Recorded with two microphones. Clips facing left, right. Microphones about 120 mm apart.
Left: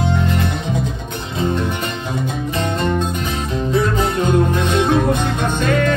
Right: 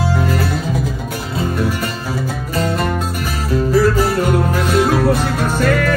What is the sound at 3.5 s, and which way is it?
Music, 20° left (ahead or behind).